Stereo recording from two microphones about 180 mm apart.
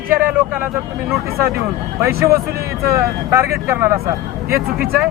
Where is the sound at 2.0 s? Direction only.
15° right (ahead or behind).